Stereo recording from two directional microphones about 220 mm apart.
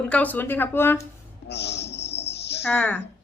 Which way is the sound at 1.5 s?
50° left (ahead or behind).